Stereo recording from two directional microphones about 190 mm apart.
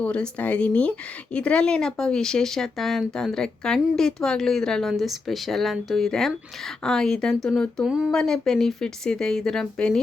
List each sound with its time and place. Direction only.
0.0 s speech: 5° left (ahead or behind)